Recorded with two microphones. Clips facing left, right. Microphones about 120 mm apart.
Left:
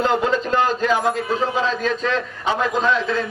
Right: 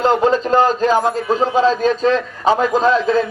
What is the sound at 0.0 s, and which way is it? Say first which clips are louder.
A man's voice: right 5 dB; 35° right (ahead or behind).